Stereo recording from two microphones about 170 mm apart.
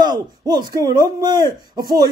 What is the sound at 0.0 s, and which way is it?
Speech, 25° right (ahead or behind).